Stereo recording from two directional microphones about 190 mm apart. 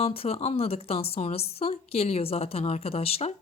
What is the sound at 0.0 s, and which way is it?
Speech, 30° left (ahead or behind).